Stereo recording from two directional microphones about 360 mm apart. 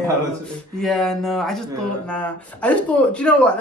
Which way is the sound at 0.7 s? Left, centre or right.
Centre.